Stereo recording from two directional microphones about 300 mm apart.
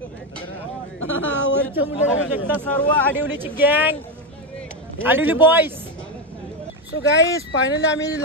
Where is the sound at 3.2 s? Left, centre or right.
Centre.